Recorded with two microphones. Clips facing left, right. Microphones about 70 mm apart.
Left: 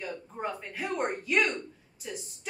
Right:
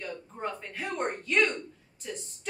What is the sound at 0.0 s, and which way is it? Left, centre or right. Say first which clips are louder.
A woman's voice: left 1 dB; centre.